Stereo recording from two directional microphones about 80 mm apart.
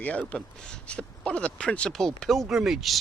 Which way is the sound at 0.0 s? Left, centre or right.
Centre.